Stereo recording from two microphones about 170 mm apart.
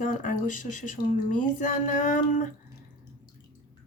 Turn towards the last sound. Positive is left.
turn(degrees=50)  # may be behind; listen again after turning